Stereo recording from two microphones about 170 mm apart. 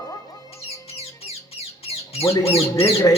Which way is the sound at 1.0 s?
35° left (ahead or behind).